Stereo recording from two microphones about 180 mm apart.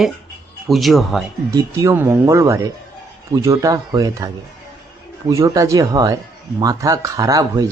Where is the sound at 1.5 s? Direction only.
15° right (ahead or behind).